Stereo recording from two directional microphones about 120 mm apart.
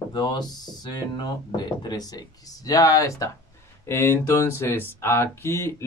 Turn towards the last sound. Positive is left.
turn(degrees=20)  # may be behind; listen again after turning